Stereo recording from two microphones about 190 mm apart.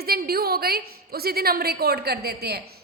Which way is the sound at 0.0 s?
55° right (ahead or behind).